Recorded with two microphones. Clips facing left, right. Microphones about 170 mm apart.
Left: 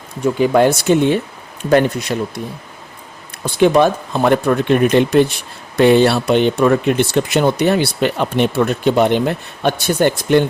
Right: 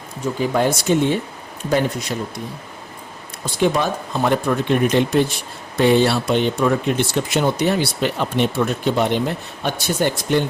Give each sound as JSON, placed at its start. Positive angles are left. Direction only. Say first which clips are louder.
{"t": 0.3, "sound": "speech", "louder": "left 6 dB", "side_deg": 70}
{"t": 3.4, "sound": "speech", "louder": "left 7 dB", "side_deg": 60}